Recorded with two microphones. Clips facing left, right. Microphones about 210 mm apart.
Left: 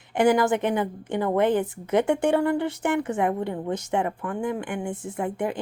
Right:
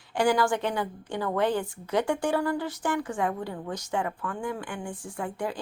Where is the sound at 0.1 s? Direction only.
20° left (ahead or behind).